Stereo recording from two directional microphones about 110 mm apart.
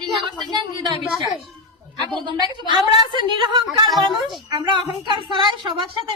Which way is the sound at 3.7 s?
Centre (ahead or behind).